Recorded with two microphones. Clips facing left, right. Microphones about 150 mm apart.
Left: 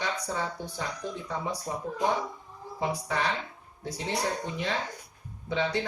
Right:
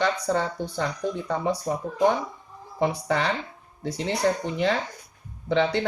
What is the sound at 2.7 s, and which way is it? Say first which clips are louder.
Speech: right 6 dB; 70° right (ahead or behind).